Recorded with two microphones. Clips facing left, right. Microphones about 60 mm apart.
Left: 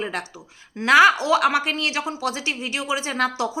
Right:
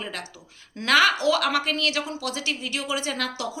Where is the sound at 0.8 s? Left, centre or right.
Left.